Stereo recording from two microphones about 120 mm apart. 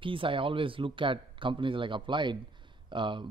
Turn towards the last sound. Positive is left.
turn(degrees=-40)  # may be behind; listen again after turning